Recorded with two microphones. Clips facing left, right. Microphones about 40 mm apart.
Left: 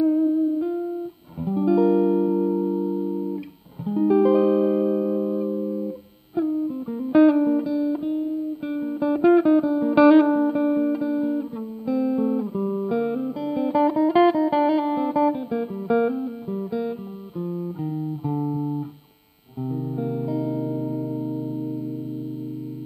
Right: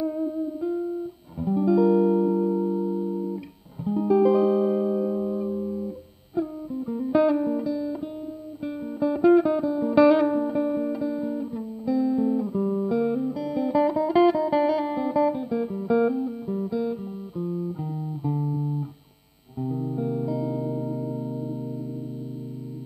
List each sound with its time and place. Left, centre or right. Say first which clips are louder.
0.0 s music: left 8 dB; centre
19.7 s music: left 1 dB; centre